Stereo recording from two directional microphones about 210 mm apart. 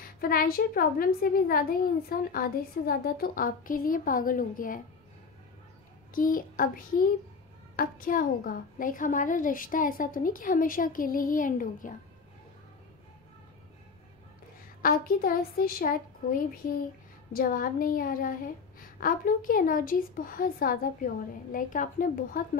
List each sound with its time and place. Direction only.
0.0 s a woman's voice: 45° left (ahead or behind)
6.1 s a woman's voice: 40° left (ahead or behind)
14.8 s a woman's voice: 45° left (ahead or behind)